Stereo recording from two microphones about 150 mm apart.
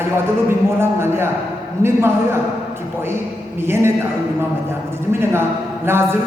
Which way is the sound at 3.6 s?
15° right (ahead or behind).